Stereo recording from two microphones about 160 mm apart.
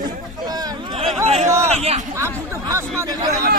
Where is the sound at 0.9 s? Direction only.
40° right (ahead or behind).